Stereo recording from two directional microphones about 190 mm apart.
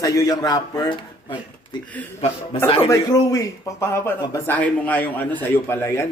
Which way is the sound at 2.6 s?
30° left (ahead or behind).